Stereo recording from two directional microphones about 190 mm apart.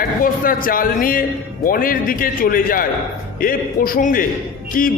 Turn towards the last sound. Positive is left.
turn(degrees=45)  # may be behind; listen again after turning